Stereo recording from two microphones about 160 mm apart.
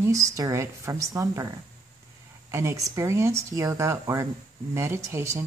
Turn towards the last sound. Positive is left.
turn(degrees=-15)  # may be behind; listen again after turning